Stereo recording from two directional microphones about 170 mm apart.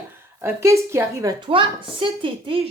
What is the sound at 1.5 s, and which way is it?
A woman's voice, 30° right (ahead or behind).